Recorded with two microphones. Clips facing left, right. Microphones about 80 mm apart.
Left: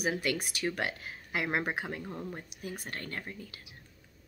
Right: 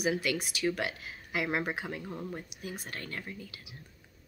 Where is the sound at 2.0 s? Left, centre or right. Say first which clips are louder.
Even; centre.